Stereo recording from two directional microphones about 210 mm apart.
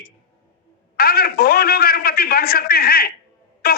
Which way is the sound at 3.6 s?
45° left (ahead or behind).